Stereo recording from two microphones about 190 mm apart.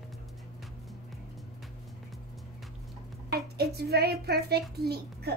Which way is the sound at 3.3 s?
55° right (ahead or behind).